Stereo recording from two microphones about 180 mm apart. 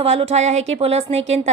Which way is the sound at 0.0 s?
35° right (ahead or behind).